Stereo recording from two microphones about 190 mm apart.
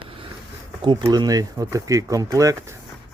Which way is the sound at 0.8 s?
25° right (ahead or behind).